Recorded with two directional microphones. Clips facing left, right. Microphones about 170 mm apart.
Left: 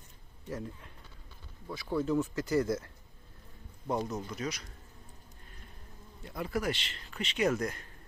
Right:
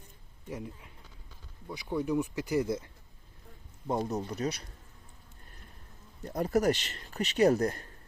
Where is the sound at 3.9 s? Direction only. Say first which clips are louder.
Right 2 dB; 30° right (ahead or behind).